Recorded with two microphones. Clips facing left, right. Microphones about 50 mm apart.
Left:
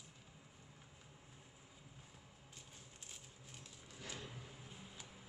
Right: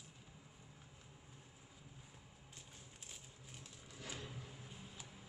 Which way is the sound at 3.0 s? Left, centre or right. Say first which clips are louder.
Right 1 dB; centre.